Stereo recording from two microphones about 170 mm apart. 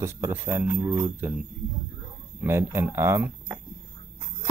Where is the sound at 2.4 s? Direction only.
15° right (ahead or behind).